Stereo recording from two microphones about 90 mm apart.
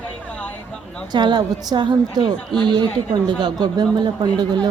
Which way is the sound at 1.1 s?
55° right (ahead or behind).